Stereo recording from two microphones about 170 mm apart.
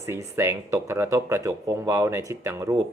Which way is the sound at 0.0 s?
15° right (ahead or behind).